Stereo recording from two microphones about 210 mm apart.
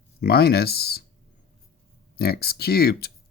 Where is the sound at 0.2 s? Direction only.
50° left (ahead or behind).